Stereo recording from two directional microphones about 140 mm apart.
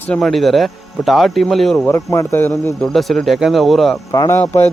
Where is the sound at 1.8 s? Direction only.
20° left (ahead or behind).